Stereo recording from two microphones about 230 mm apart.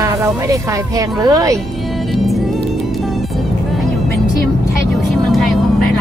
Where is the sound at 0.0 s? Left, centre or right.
Centre.